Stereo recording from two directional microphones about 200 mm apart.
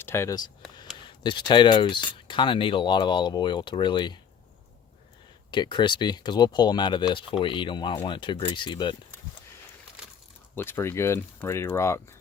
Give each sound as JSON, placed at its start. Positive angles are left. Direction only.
{"t": 0.0, "sound": "speech", "side_deg": 10}
{"t": 5.5, "sound": "speech", "side_deg": 25}
{"t": 10.5, "sound": "speech", "side_deg": 10}